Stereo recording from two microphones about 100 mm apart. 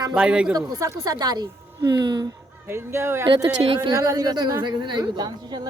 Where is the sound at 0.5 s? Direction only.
35° right (ahead or behind).